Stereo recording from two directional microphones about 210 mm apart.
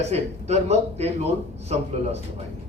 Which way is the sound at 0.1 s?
30° right (ahead or behind).